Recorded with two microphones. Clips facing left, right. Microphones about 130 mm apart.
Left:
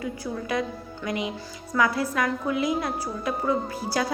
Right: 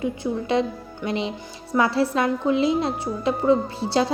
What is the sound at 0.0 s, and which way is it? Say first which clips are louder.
A woman's voice: right 6 dB; 25° right (ahead or behind).